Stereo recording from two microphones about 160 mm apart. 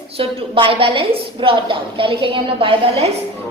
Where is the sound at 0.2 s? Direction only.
35° right (ahead or behind).